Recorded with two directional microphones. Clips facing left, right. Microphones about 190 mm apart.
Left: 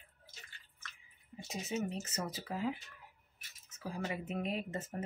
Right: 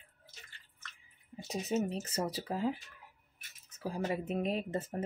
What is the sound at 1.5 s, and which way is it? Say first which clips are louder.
Speech: right 5 dB; 35° right (ahead or behind).